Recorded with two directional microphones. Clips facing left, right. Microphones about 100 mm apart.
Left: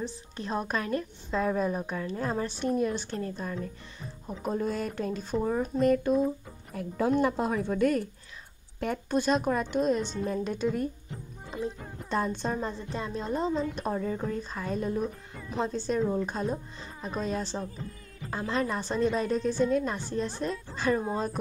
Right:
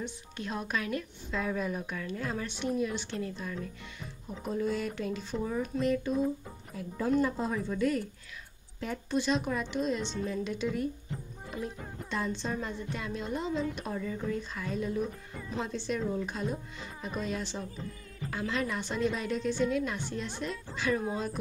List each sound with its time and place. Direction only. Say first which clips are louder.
0.0 s a woman's voice: left 2 dB; 35° left (ahead or behind)
12.1 s speech: left 4 dB; 45° left (ahead or behind)
12.5 s a woman's voice: left 3 dB; 30° left (ahead or behind)